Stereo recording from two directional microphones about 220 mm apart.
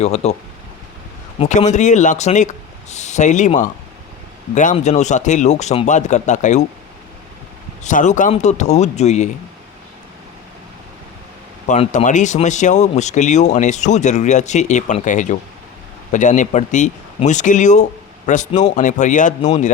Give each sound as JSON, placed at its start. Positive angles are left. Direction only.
{"t": 0.0, "sound": "speech", "side_deg": 30}
{"t": 1.4, "sound": "speech", "side_deg": 30}
{"t": 7.9, "sound": "speech", "side_deg": 35}
{"t": 11.7, "sound": "speech", "side_deg": 30}